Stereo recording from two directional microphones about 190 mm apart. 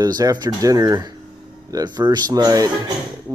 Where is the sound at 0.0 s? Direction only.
20° right (ahead or behind).